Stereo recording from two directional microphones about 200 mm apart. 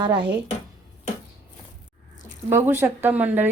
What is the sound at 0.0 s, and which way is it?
Speech, 25° right (ahead or behind).